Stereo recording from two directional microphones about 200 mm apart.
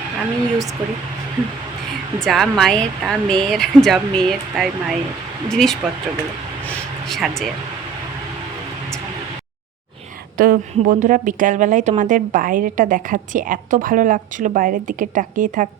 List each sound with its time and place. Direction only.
2.2 s speech: centre (ahead or behind)
6.7 s a sound: 5° left (ahead or behind)
10.3 s a woman's voice: 45° right (ahead or behind)